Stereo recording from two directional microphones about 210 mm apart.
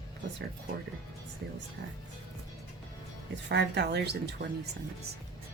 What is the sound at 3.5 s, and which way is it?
Speech, 55° right (ahead or behind).